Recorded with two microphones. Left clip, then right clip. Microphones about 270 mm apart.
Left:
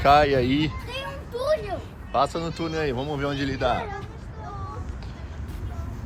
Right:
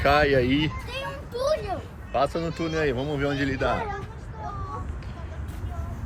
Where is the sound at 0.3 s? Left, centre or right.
Left.